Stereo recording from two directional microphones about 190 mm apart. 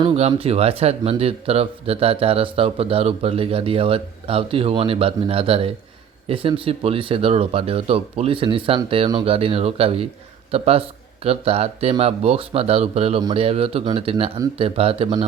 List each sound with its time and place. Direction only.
0.0 s speech: 30° right (ahead or behind)